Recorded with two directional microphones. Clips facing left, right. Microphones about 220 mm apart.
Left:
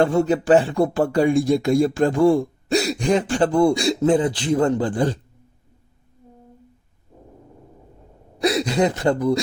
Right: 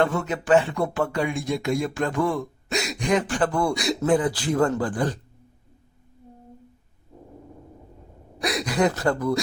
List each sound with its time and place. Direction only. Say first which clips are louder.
0.0 s speech: left 6 dB; 30° left (ahead or behind)
8.4 s speech: left 4 dB; 30° left (ahead or behind)